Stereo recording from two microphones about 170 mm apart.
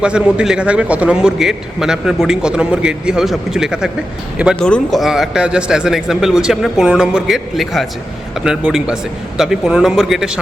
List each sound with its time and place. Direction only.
0.0 s a man's voice: 5° right (ahead or behind)